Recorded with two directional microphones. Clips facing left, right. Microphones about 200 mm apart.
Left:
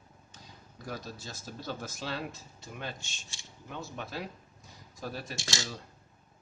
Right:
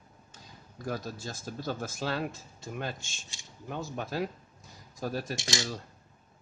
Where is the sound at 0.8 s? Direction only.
45° right (ahead or behind).